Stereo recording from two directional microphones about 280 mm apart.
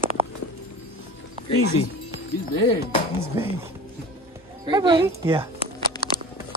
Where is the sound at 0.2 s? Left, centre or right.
Right.